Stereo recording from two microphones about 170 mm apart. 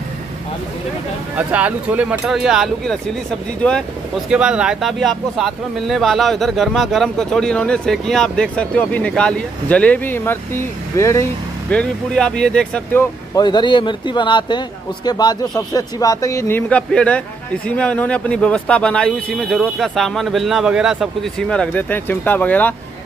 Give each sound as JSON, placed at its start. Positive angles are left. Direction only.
{"t": 1.3, "sound": "speech", "side_deg": -10}
{"t": 11.7, "sound": "speech", "side_deg": 5}
{"t": 13.4, "sound": "speech", "side_deg": 25}